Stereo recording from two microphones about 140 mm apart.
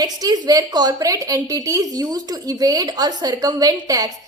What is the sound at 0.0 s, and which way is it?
A woman's voice, 30° right (ahead or behind).